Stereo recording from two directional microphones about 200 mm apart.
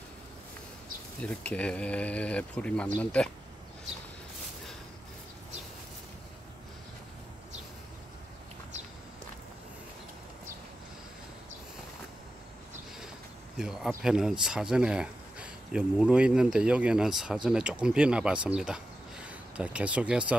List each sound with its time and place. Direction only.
1.2 s speech: 5° left (ahead or behind)
13.6 s speech: 5° right (ahead or behind)